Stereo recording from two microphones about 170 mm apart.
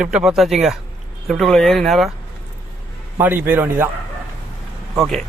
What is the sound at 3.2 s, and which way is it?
Speech, 10° right (ahead or behind).